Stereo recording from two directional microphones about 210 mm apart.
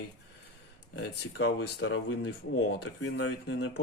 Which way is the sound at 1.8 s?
75° left (ahead or behind).